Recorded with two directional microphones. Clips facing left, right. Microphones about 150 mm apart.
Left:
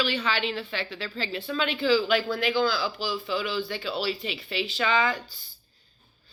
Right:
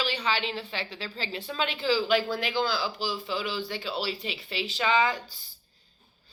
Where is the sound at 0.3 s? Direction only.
35° right (ahead or behind).